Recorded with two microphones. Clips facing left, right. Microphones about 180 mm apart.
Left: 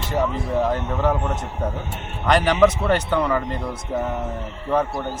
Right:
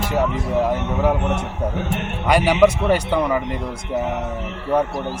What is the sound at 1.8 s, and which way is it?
Speech, 75° right (ahead or behind).